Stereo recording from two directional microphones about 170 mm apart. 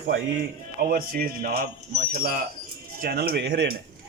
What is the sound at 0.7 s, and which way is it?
Speech, 60° right (ahead or behind).